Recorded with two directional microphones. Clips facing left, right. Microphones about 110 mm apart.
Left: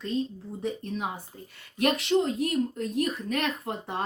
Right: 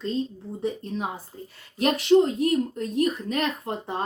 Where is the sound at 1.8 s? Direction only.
30° right (ahead or behind).